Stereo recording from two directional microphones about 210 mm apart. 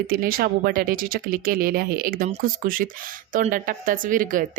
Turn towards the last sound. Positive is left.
turn(degrees=-40)  # may be behind; listen again after turning